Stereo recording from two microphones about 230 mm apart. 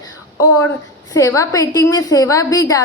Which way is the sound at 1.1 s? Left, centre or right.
Centre.